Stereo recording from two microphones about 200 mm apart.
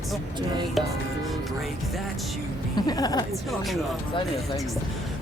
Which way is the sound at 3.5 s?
Centre (ahead or behind).